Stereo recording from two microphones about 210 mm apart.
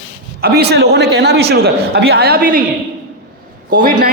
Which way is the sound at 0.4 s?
50° right (ahead or behind).